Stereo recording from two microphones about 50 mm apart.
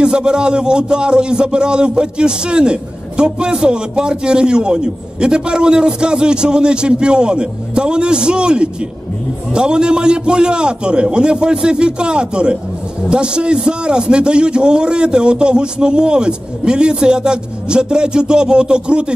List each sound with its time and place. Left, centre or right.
0.0 s a man's voice: centre